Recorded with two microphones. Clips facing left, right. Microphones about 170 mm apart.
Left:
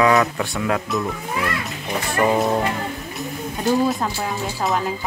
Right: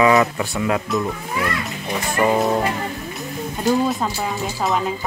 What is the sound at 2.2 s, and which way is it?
Speech, centre (ahead or behind).